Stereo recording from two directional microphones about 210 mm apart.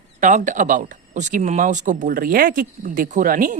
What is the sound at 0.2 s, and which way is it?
Speech, 35° right (ahead or behind).